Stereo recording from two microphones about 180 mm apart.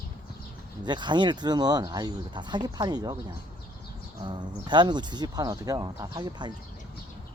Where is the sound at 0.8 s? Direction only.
25° right (ahead or behind).